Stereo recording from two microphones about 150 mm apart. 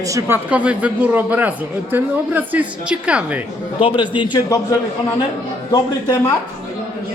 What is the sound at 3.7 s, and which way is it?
Speech, 35° left (ahead or behind).